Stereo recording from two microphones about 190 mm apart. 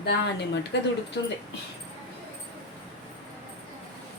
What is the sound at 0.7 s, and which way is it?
Speech, 60° left (ahead or behind).